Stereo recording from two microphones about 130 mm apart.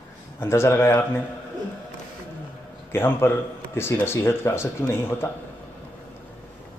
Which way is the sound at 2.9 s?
15° left (ahead or behind).